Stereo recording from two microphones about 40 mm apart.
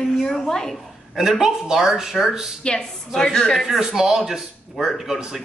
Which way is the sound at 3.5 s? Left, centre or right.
Centre.